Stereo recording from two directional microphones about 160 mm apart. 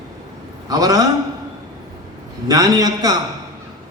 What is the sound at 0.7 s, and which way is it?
Speech, 25° right (ahead or behind).